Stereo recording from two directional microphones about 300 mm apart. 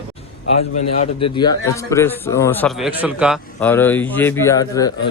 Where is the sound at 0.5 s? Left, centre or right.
Left.